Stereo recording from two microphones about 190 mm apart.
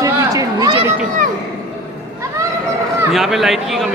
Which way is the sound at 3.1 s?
Centre (ahead or behind).